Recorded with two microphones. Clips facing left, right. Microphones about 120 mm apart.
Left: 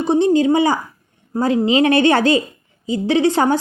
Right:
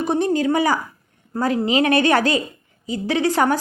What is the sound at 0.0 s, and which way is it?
A woman's voice, 25° left (ahead or behind).